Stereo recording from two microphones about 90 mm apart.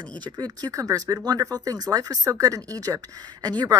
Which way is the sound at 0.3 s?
50° right (ahead or behind).